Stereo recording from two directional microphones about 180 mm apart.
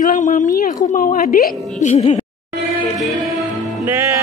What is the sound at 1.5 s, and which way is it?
Speech, centre (ahead or behind).